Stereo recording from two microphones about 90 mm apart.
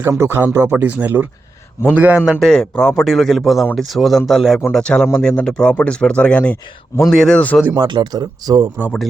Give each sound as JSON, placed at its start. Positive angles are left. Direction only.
{"t": 0.1, "sound": "a man's voice", "side_deg": -30}
{"t": 2.4, "sound": "a man's voice", "side_deg": 5}
{"t": 7.1, "sound": "a man's voice", "side_deg": 0}
{"t": 7.8, "sound": "speech", "side_deg": -55}